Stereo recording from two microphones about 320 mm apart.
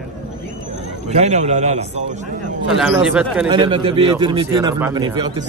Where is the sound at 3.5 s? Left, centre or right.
Centre.